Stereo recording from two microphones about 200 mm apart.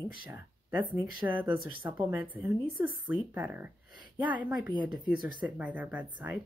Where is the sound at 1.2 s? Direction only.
10° right (ahead or behind).